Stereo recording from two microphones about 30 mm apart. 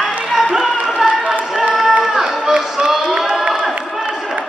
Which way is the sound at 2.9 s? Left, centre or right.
Centre.